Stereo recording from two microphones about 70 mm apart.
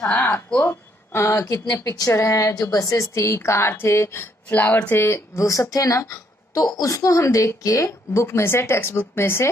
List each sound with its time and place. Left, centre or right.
0.6 s a woman's voice: left
1.4 s a woman's voice: left
2.5 s a woman's voice: left
4.5 s speech: left
5.0 s a woman's voice: left
6.0 s a sound: left
6.8 s a woman's voice: left